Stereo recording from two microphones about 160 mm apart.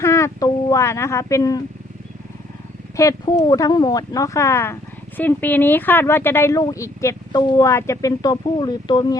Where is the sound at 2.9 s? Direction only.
20° left (ahead or behind).